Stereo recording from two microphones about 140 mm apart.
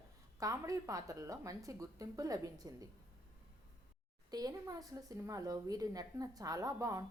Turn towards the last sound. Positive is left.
turn(degrees=-25)  # may be behind; listen again after turning